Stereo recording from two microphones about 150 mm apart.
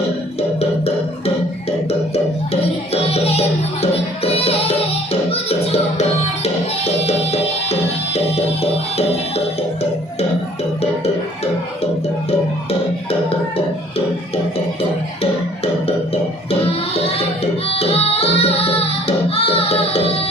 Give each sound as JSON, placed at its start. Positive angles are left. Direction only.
{"t": 1.9, "sound": "music", "side_deg": 45}
{"t": 15.2, "sound": "music", "side_deg": 40}
{"t": 16.5, "sound": "a sound", "side_deg": 40}
{"t": 17.7, "sound": "music", "side_deg": 40}